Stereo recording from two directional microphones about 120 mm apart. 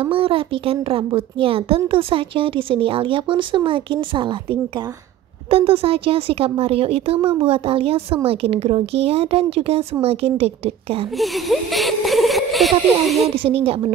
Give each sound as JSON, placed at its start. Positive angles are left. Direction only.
{"t": 0.0, "sound": "a woman's voice", "side_deg": -50}
{"t": 5.5, "sound": "a woman's voice", "side_deg": -50}
{"t": 11.1, "sound": "speech", "side_deg": 0}
{"t": 13.4, "sound": "a woman's voice", "side_deg": -50}